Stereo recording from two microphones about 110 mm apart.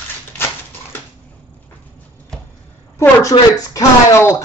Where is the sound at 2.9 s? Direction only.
25° left (ahead or behind).